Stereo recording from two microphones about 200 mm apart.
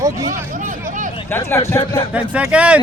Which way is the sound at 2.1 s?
5° right (ahead or behind).